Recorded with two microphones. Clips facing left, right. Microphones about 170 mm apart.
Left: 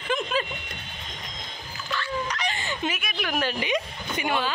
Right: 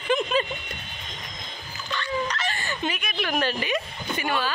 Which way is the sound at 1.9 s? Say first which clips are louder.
Right 2 dB; 5° left (ahead or behind).